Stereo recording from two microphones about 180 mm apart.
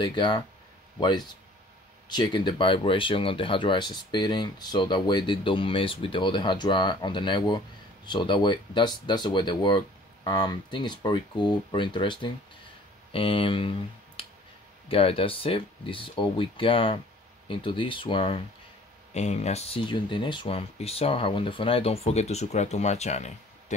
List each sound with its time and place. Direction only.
0.0 s speech: 25° left (ahead or behind)